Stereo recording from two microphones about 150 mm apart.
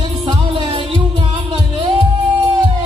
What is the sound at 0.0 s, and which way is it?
Music, 30° right (ahead or behind).